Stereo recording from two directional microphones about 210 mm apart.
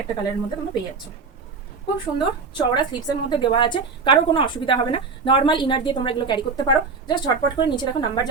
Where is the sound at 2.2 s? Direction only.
20° left (ahead or behind).